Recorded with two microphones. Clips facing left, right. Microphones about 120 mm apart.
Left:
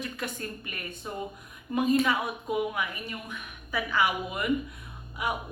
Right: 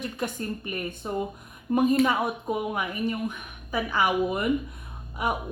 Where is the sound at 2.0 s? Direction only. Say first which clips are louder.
Right 4 dB; 25° right (ahead or behind).